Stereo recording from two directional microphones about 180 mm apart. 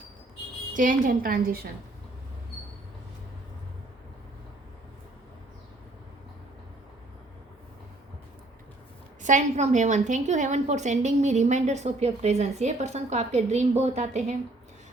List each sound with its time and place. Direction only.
0.7 s a woman's voice: 45° right (ahead or behind)
9.2 s a woman's voice: 40° right (ahead or behind)